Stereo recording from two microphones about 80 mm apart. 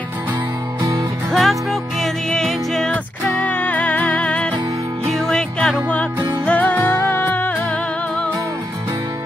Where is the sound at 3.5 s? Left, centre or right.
Left.